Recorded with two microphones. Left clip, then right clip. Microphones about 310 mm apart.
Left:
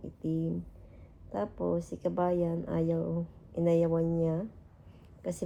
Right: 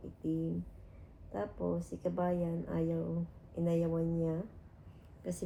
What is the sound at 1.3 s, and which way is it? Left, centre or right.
Speech, left.